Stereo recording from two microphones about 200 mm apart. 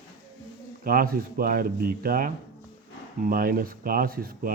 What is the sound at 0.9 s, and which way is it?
Speech, 45° right (ahead or behind).